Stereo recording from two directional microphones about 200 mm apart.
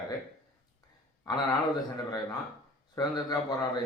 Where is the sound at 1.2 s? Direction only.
20° left (ahead or behind).